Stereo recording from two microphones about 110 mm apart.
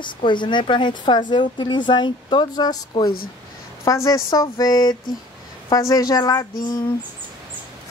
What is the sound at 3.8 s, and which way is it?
A woman's voice, 25° left (ahead or behind).